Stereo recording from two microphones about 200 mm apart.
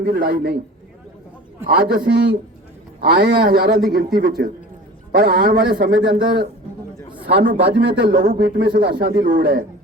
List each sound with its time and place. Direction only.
0.0 s a man's voice: 45° right (ahead or behind)
1.6 s a man's voice: 45° right (ahead or behind)